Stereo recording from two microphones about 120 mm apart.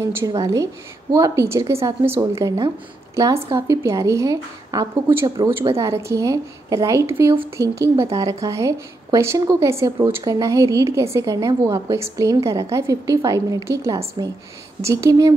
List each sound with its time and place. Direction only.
0.0 s a woman's voice: 20° right (ahead or behind)
3.5 s a woman's voice: 25° right (ahead or behind)
5.5 s a woman's voice: 20° right (ahead or behind)